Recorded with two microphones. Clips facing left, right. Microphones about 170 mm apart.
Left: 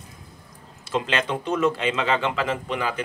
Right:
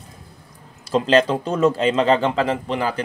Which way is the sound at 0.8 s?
35° right (ahead or behind).